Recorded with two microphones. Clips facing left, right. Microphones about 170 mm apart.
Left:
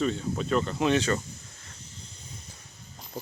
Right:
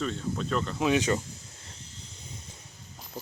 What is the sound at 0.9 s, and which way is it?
Speech, 15° right (ahead or behind).